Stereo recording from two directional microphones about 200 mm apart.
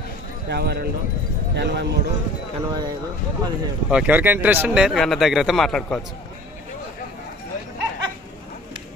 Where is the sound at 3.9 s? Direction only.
5° right (ahead or behind).